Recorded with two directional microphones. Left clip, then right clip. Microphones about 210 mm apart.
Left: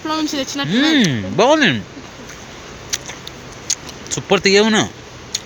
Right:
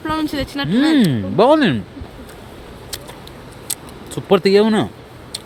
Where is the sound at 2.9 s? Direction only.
20° right (ahead or behind).